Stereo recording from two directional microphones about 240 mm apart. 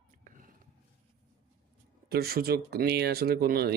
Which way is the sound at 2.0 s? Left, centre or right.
Right.